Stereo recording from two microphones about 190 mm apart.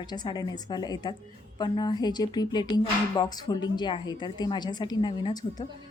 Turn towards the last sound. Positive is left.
turn(degrees=20)  # may be behind; listen again after turning